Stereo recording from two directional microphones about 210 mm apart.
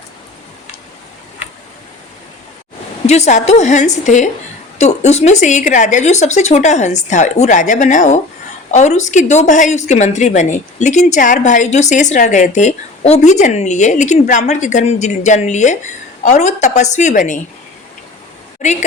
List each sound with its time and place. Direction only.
3.1 s a woman's voice: 35° left (ahead or behind)
18.6 s a woman's voice: 35° left (ahead or behind)